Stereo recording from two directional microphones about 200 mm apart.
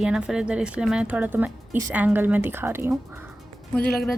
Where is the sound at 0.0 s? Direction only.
5° right (ahead or behind).